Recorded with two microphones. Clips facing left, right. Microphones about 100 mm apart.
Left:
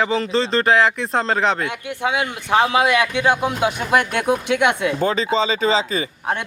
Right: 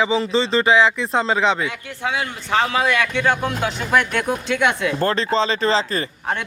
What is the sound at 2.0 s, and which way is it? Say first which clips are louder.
A man's voice: left 2 dB; 15° left (ahead or behind).